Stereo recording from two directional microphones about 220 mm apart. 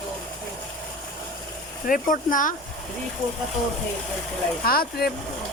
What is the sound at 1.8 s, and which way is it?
Speech, 40° left (ahead or behind).